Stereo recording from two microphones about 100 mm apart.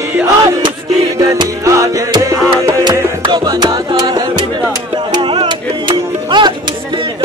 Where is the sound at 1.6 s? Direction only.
35° right (ahead or behind).